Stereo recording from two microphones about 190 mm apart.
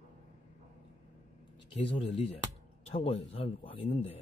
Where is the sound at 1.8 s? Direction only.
30° left (ahead or behind).